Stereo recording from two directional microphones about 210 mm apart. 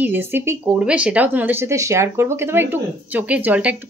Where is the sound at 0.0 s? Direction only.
10° right (ahead or behind).